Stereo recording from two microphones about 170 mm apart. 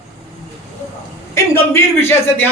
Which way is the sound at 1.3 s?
15° left (ahead or behind).